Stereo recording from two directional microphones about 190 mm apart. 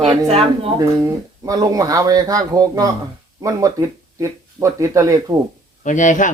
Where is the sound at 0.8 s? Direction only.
15° right (ahead or behind).